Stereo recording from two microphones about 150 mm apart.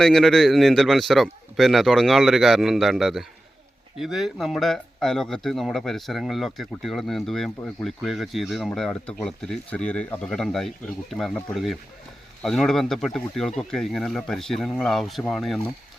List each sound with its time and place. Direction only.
0.0 s speech: 5° left (ahead or behind)